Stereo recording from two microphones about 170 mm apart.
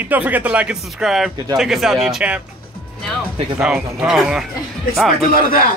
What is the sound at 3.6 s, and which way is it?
Speech, 5° right (ahead or behind).